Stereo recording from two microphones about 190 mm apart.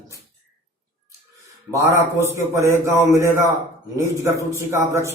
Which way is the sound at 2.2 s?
15° right (ahead or behind).